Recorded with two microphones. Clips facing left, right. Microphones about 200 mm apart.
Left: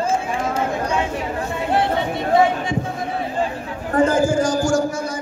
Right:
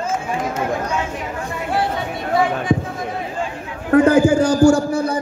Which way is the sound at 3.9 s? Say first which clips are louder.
Right 5 dB; 65° right (ahead or behind).